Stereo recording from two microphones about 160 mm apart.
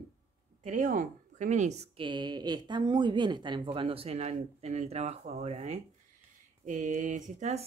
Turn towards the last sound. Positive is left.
turn(degrees=-45)  # may be behind; listen again after turning